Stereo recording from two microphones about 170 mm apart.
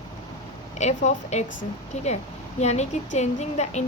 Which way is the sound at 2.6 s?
40° left (ahead or behind).